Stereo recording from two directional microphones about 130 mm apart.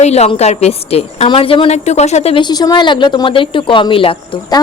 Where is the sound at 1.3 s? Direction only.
45° left (ahead or behind).